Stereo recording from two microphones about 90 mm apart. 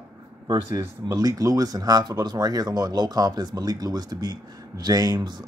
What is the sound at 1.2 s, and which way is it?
Speech, 40° right (ahead or behind).